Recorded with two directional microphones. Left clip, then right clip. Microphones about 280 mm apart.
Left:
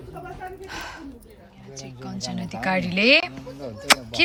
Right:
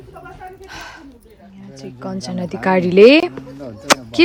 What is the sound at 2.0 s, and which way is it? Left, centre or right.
Speech, centre.